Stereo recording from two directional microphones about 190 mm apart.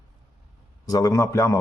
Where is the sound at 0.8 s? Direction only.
20° left (ahead or behind).